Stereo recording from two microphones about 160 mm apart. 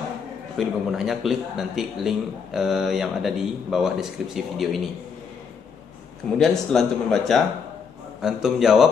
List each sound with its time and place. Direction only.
0.6 s a man's voice: centre (ahead or behind)
6.3 s a man's voice: 5° left (ahead or behind)